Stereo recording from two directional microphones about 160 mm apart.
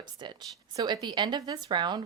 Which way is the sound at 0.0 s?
30° right (ahead or behind).